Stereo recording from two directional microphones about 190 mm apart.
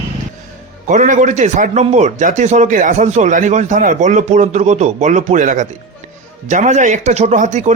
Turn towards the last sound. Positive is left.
turn(degrees=-40)  # may be behind; listen again after turning